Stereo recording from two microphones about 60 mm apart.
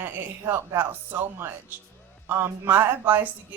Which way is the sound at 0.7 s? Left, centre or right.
Right.